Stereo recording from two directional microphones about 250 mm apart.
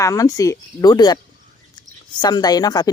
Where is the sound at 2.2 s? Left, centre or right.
Centre.